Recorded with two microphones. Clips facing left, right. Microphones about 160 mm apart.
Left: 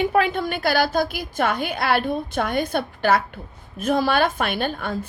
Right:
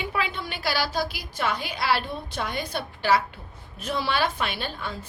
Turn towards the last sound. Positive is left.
turn(degrees=50)  # may be behind; listen again after turning